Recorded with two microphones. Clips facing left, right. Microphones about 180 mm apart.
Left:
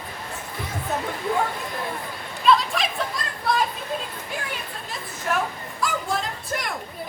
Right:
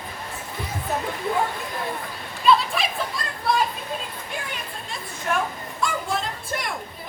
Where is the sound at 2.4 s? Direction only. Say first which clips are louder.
Even; centre (ahead or behind).